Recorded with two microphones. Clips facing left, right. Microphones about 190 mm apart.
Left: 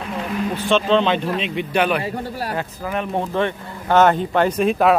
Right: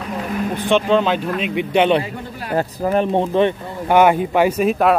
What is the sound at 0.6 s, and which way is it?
A man's voice, 15° right (ahead or behind).